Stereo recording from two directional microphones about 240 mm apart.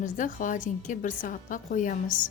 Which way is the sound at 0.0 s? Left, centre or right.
Left.